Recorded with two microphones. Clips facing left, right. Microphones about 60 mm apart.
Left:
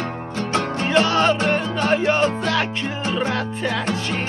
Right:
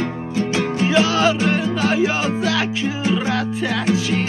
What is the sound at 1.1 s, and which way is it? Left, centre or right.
Music, centre.